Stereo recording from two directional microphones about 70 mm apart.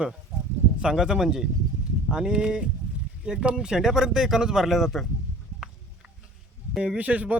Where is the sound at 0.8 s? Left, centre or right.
Centre.